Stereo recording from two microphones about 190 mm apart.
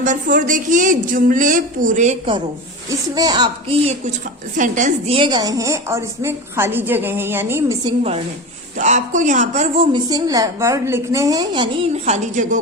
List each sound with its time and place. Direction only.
0.0 s a woman's voice: 45° right (ahead or behind)
3.2 s a woman's voice: 20° right (ahead or behind)
8.8 s speech: 40° right (ahead or behind)
9.9 s a woman's voice: 20° right (ahead or behind); by 12.5 s 40° right (ahead or behind)